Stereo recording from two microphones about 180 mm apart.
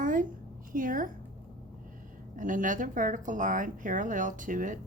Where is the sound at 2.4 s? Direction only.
45° right (ahead or behind).